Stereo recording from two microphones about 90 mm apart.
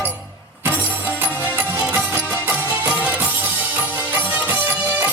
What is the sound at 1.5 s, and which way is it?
Music, 20° right (ahead or behind).